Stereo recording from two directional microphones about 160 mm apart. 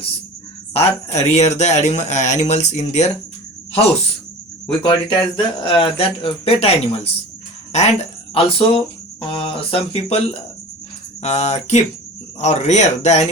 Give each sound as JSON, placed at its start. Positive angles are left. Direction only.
{"t": 0.7, "sound": "speech", "side_deg": 40}
{"t": 4.8, "sound": "speech", "side_deg": 30}